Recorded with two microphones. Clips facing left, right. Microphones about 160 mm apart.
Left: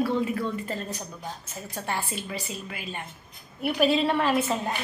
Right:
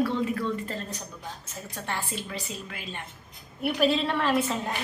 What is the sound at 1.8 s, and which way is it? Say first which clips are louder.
A woman's voice: left 2 dB; 10° left (ahead or behind).